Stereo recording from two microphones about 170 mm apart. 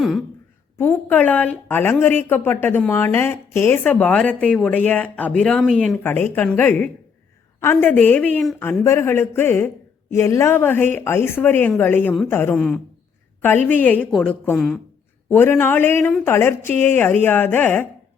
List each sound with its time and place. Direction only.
0.8 s a woman's voice: 10° left (ahead or behind)